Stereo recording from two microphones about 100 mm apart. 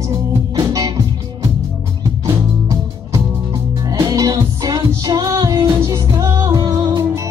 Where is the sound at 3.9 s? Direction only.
35° right (ahead or behind).